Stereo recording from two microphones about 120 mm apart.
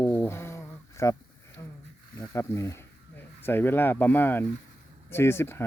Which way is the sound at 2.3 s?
25° left (ahead or behind).